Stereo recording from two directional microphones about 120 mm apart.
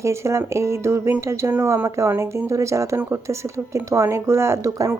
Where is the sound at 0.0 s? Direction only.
25° right (ahead or behind).